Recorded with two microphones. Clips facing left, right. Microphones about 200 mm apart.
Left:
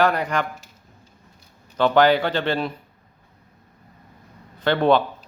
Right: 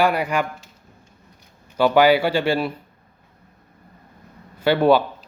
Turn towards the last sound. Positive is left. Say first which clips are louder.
# right 2 dB
turn(degrees=-10)  # may be behind; listen again after turning